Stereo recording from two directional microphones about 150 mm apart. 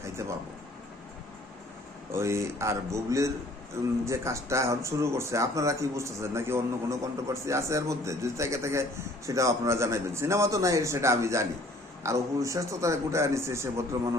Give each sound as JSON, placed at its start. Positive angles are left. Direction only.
{"t": 0.2, "sound": "speech", "side_deg": -20}
{"t": 2.1, "sound": "speech", "side_deg": -20}